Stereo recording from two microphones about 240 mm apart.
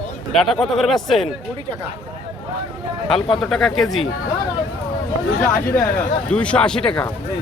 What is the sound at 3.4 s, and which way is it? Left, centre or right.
Speech, centre.